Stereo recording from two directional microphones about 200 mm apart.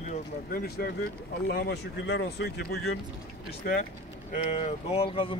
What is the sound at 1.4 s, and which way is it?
Speech, 50° left (ahead or behind).